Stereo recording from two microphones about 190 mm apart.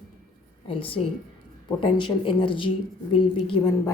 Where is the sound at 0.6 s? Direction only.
30° left (ahead or behind).